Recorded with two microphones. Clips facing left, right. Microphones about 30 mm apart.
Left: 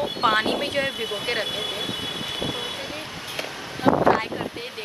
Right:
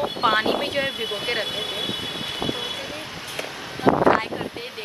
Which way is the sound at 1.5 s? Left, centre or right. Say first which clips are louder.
Even; centre.